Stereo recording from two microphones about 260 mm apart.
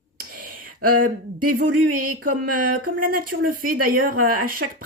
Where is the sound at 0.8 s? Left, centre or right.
Right.